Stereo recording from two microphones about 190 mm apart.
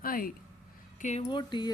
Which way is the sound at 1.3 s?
25° left (ahead or behind).